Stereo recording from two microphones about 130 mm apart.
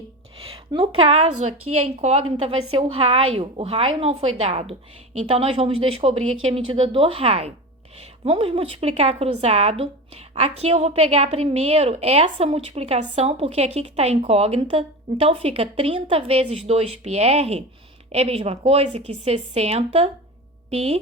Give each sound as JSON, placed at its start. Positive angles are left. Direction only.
{"t": 0.4, "sound": "speech", "side_deg": -45}
{"t": 2.0, "sound": "a woman's voice", "side_deg": -65}
{"t": 2.5, "sound": "speech", "side_deg": -45}